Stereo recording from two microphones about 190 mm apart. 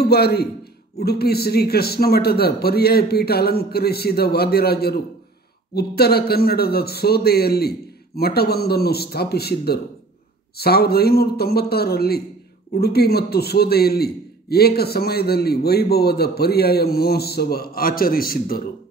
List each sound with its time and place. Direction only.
0.0 s a man's voice: 55° left (ahead or behind)